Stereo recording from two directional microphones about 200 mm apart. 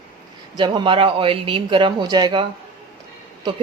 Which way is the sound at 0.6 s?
25° right (ahead or behind).